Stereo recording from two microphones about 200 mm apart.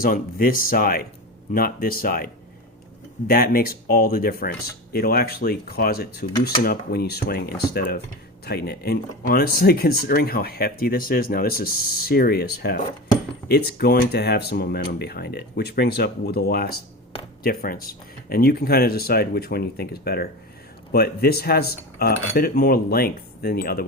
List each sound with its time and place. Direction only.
0.0 s speech: 45° left (ahead or behind)
13.5 s speech: 50° left (ahead or behind)